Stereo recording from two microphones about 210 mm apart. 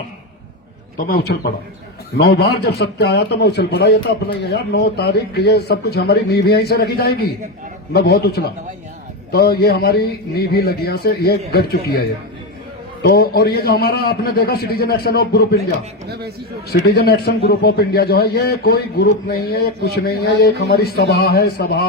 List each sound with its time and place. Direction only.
0.9 s a man's voice: 45° left (ahead or behind)
16.6 s a man's voice: 50° left (ahead or behind)